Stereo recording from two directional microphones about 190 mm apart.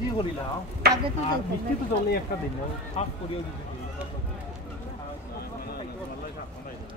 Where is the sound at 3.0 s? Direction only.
35° left (ahead or behind).